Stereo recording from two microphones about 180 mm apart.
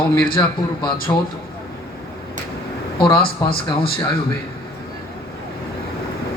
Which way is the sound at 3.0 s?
30° left (ahead or behind).